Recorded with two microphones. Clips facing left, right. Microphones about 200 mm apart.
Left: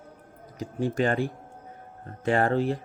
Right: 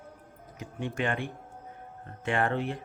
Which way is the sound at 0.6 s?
35° left (ahead or behind).